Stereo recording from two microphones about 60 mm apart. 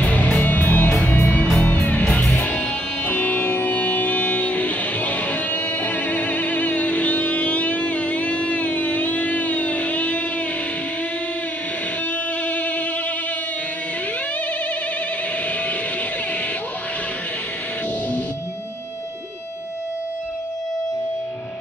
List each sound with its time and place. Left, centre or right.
0.1 s music: left
12.4 s music: left